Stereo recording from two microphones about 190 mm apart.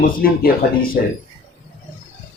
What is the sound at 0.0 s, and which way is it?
Speech, 50° left (ahead or behind).